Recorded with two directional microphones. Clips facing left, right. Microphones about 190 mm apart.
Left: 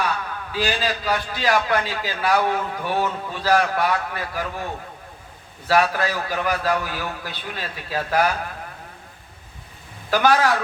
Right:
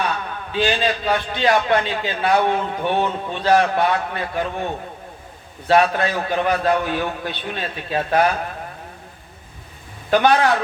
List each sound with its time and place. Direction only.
0.0 s a man's voice: 25° right (ahead or behind)
10.1 s a man's voice: 25° right (ahead or behind)